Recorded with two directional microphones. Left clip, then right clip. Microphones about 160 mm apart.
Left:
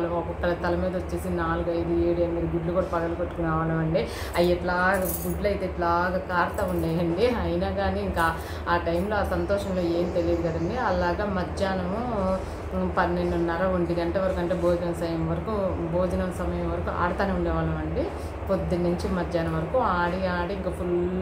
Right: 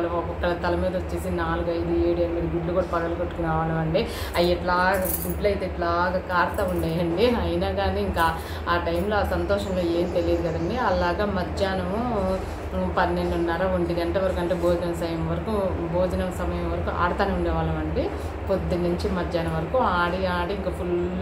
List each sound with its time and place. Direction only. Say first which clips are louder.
3.9 s a woman's voice: right 2 dB; 10° left (ahead or behind)
12.9 s a woman's voice: right 1 dB; 10° left (ahead or behind)
18.7 s a woman's voice: right 1 dB; 10° left (ahead or behind)